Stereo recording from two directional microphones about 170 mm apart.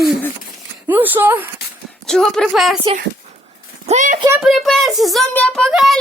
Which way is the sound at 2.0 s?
Centre (ahead or behind).